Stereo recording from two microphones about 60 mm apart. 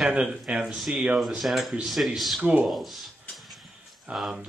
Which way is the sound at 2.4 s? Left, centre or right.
Right.